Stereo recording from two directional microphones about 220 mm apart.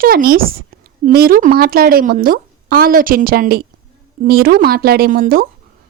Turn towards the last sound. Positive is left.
turn(degrees=-40)  # may be behind; listen again after turning